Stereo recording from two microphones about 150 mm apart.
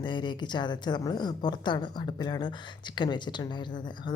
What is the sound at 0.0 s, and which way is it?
Speech, 30° left (ahead or behind).